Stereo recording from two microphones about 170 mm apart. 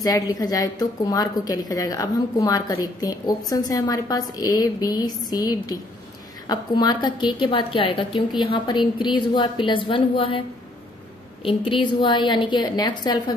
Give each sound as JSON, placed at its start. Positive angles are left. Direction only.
{"t": 0.0, "sound": "a woman's voice", "side_deg": 20}
{"t": 11.4, "sound": "a woman's voice", "side_deg": 30}